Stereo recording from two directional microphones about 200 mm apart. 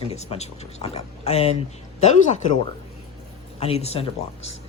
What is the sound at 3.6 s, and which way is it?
Speech, 30° left (ahead or behind).